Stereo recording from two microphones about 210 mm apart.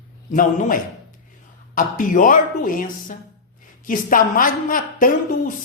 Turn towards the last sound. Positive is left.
turn(degrees=40)  # may be behind; listen again after turning